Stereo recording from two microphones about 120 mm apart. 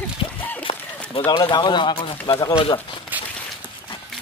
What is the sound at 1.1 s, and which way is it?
Speech, 40° left (ahead or behind).